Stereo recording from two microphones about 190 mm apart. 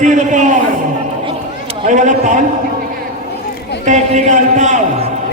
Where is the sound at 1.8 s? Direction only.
40° right (ahead or behind).